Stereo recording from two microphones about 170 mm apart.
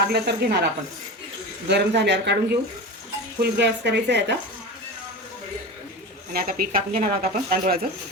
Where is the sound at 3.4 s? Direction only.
90° right.